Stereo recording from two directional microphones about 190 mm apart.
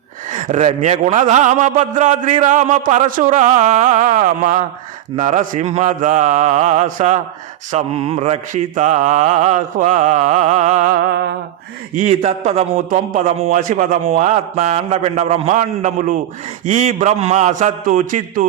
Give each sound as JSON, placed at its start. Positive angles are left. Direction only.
{"t": 0.3, "sound": "a man's voice", "side_deg": -40}